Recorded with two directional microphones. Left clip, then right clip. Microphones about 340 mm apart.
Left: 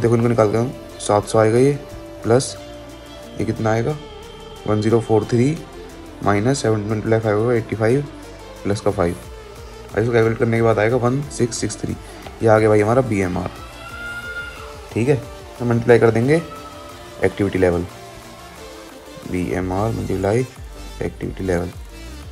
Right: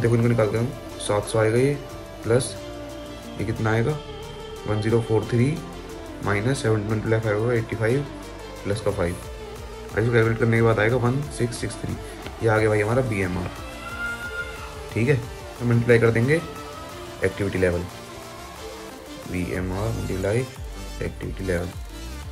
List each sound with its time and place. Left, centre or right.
0.0 s speech: centre
15.0 s speech: centre
19.5 s speech: centre